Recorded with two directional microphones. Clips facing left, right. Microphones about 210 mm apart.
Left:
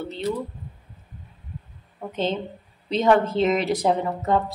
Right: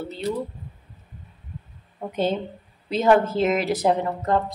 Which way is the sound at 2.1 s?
10° right (ahead or behind).